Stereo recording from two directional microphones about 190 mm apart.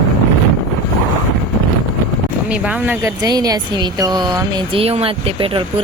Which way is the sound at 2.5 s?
5° right (ahead or behind).